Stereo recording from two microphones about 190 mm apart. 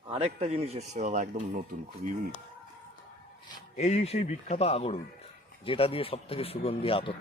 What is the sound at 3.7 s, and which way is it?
Speech, 35° left (ahead or behind).